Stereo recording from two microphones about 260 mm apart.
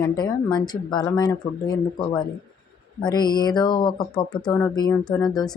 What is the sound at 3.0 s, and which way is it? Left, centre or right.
Speech, centre.